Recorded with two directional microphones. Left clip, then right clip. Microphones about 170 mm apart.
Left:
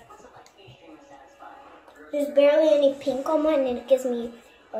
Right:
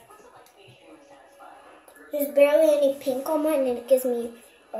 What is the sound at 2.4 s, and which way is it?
A woman's voice, 35° right (ahead or behind).